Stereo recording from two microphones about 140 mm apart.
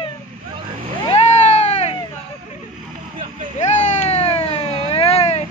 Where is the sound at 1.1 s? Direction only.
50° left (ahead or behind).